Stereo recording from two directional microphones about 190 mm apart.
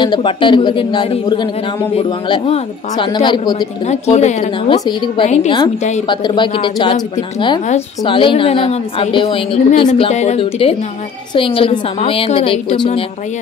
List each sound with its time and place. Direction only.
0.0 s a woman's voice: 25° left (ahead or behind)
3.8 s speech: 35° left (ahead or behind)
4.7 s a woman's voice: 25° left (ahead or behind)
6.0 s a woman's voice: 25° left (ahead or behind)